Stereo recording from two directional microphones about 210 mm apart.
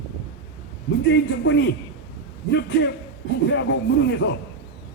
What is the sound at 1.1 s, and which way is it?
A man's voice, 60° left (ahead or behind).